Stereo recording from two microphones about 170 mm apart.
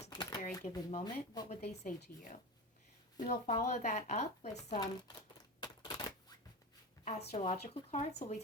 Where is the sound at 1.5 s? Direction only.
40° left (ahead or behind).